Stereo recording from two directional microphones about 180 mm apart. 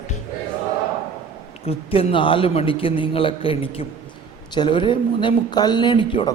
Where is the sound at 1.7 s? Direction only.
30° left (ahead or behind).